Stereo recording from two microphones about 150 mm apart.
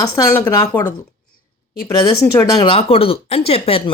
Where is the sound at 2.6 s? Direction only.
40° left (ahead or behind).